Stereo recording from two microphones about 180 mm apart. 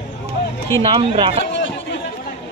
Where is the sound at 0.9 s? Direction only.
30° right (ahead or behind).